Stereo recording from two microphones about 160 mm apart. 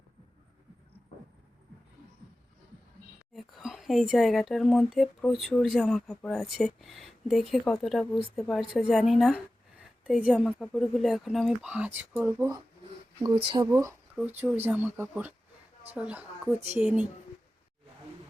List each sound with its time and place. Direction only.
3.3 s a woman's voice: centre (ahead or behind)
10.3 s speech: centre (ahead or behind)
13.7 s speech: 20° right (ahead or behind)
14.2 s speech: 10° right (ahead or behind)